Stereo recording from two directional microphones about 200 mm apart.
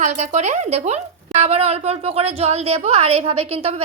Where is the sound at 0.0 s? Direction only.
35° right (ahead or behind).